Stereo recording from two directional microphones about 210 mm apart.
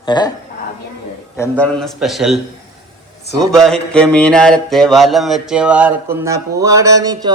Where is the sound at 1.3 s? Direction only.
10° left (ahead or behind).